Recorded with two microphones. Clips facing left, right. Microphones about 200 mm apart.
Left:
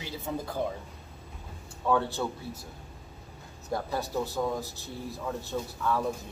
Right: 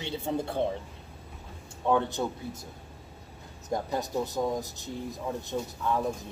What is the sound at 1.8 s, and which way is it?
Speech, 20° right (ahead or behind).